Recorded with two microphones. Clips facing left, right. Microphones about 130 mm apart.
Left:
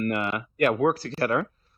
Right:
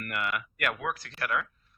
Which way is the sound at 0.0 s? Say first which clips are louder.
Left 7 dB; 30° left (ahead or behind).